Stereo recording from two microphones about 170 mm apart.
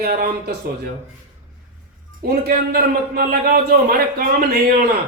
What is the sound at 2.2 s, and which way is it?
A man's voice, 65° right (ahead or behind).